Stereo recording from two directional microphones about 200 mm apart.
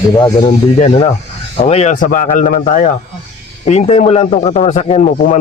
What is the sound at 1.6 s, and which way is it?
Speech, 35° left (ahead or behind).